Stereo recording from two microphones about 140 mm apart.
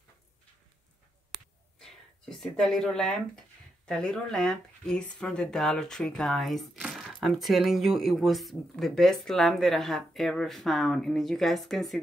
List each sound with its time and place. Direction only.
1.8 s speech: centre (ahead or behind)